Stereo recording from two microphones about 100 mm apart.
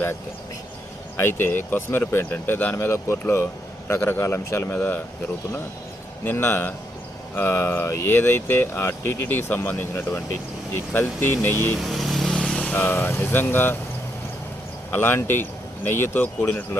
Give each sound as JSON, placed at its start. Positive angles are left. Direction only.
{"t": 1.2, "sound": "speech", "side_deg": 20}
{"t": 6.2, "sound": "speech", "side_deg": 25}
{"t": 11.8, "sound": "speech", "side_deg": 0}
{"t": 14.8, "sound": "speech", "side_deg": 20}